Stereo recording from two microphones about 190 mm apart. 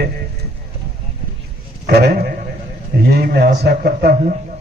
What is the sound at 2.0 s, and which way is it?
A man's voice, 55° right (ahead or behind).